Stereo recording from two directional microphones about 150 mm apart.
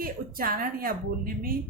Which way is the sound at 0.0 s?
75° right (ahead or behind).